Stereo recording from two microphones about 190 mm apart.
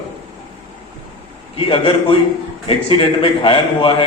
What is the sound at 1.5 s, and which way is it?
A man's voice, 30° left (ahead or behind).